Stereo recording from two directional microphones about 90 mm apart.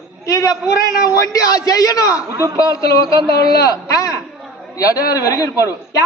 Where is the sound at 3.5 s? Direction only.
40° left (ahead or behind).